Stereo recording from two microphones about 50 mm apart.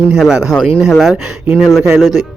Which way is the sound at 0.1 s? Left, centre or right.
Centre.